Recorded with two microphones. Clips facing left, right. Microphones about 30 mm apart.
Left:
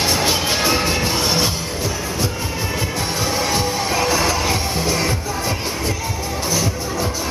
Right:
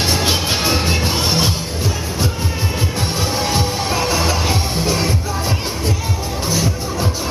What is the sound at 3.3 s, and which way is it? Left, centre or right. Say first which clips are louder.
Music: even; centre.